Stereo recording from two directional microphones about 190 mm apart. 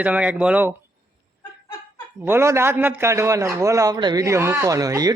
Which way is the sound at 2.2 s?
15° right (ahead or behind).